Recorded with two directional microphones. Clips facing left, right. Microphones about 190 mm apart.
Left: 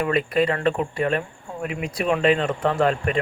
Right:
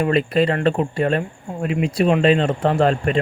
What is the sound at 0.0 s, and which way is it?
Speech, 30° right (ahead or behind).